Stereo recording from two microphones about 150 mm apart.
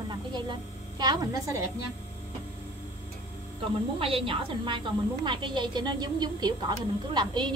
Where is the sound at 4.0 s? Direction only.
40° right (ahead or behind).